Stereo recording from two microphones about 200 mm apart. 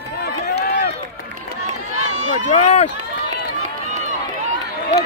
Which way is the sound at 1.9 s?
35° right (ahead or behind).